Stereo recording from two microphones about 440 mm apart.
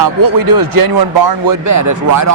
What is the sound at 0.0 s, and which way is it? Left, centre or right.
Speech, right.